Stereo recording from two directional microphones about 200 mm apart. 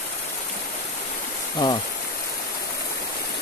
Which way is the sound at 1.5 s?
20° left (ahead or behind).